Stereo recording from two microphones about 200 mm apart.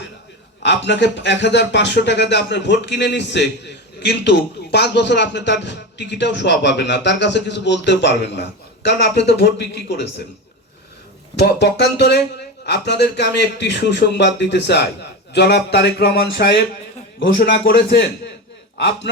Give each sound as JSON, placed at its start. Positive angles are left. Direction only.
{"t": 0.6, "sound": "speech", "side_deg": 60}
{"t": 11.3, "sound": "a man's voice", "side_deg": 55}